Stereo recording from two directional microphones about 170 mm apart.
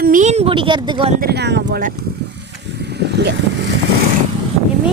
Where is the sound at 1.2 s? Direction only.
75° right (ahead or behind).